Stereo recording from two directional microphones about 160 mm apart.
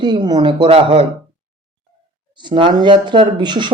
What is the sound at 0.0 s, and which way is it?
Speech, 25° right (ahead or behind).